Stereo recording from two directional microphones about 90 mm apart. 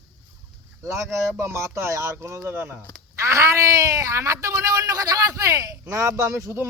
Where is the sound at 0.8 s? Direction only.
35° right (ahead or behind).